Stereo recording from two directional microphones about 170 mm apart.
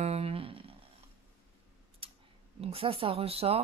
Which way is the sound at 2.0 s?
30° right (ahead or behind).